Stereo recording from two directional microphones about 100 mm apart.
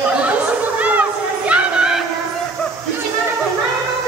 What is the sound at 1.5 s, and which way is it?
Music, 10° right (ahead or behind).